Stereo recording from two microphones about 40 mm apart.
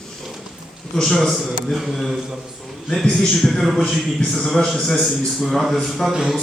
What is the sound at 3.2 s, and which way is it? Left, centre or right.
Speech, centre.